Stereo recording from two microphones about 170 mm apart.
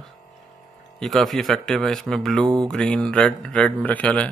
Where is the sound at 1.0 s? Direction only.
Centre (ahead or behind).